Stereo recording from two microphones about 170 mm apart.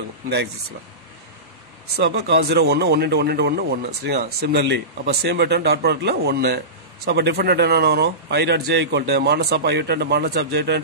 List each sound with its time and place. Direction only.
2.0 s a man's voice: 80° right